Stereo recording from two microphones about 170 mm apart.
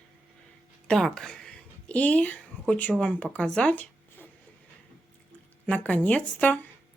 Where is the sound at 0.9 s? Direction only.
5° left (ahead or behind).